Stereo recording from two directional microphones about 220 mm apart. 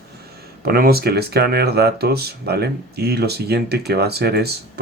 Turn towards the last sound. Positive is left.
turn(degrees=-45)  # may be behind; listen again after turning